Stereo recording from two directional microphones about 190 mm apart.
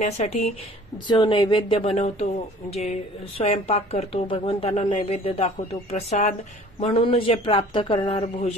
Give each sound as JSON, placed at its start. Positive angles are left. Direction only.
{"t": 0.0, "sound": "speech", "side_deg": 35}
{"t": 1.0, "sound": "a man's voice", "side_deg": 25}